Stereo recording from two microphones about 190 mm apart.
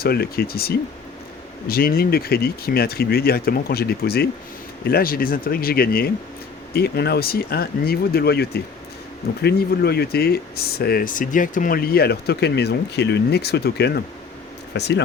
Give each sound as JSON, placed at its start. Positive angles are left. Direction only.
{"t": 0.0, "sound": "speech", "side_deg": 55}